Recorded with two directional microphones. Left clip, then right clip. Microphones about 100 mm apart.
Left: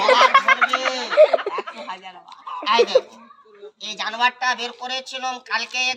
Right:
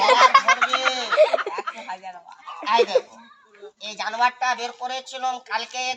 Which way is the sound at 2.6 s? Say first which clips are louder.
Left 2 dB; 35° left (ahead or behind).